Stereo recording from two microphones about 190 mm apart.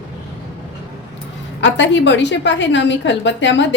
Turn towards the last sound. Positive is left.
turn(degrees=70)  # may be behind; listen again after turning